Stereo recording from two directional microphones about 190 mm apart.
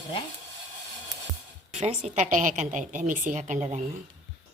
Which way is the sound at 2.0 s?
35° right (ahead or behind).